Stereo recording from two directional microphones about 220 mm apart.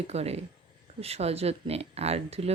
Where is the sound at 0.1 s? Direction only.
30° right (ahead or behind).